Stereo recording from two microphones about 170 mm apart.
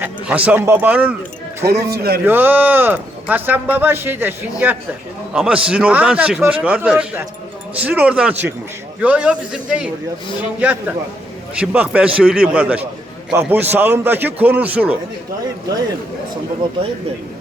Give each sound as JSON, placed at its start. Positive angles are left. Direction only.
{"t": 0.0, "sound": "a man's voice", "side_deg": -10}
{"t": 1.9, "sound": "a man's voice", "side_deg": -65}
{"t": 2.2, "sound": "speech", "side_deg": -10}